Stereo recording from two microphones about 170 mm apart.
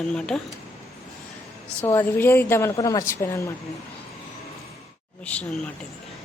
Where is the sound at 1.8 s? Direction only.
15° left (ahead or behind).